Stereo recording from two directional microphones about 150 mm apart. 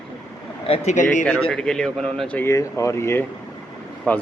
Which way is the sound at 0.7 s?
55° left (ahead or behind).